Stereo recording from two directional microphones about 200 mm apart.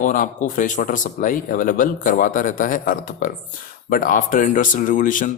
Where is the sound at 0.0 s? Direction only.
40° left (ahead or behind).